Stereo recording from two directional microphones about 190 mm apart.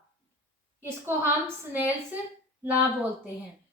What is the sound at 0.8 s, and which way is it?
Speech, 10° right (ahead or behind).